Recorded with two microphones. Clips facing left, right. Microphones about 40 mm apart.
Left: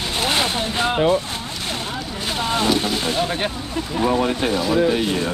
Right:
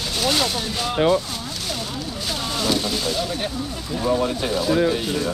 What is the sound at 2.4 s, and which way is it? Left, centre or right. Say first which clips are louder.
Speech: left 4 dB; left.